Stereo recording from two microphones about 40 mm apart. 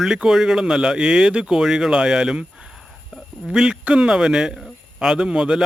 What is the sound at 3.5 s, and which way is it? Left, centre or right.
Speech, centre.